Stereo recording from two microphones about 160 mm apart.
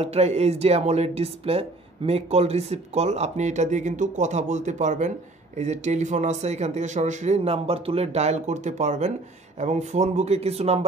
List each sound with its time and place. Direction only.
0.0 s speech: 40° right (ahead or behind)